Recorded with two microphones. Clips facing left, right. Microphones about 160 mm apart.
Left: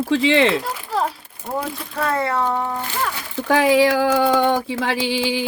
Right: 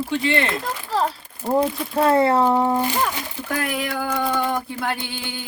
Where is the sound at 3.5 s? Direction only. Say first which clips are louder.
Left 11 dB; 90° left.